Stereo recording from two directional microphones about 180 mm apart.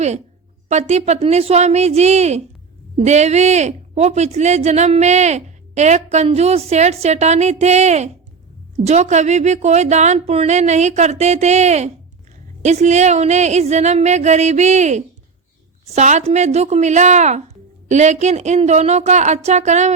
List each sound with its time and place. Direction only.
0.7 s a woman's voice: 40° right (ahead or behind)